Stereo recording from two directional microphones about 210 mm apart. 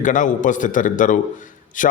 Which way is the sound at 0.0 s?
40° left (ahead or behind).